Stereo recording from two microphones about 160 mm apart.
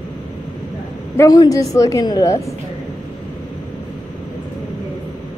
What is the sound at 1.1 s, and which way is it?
A woman's voice, 20° left (ahead or behind).